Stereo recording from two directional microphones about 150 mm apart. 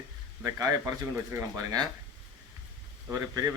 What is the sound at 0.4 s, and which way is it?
Speech, 20° right (ahead or behind).